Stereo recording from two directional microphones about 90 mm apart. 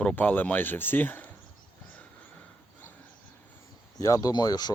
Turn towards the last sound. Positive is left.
turn(degrees=50)  # may be behind; listen again after turning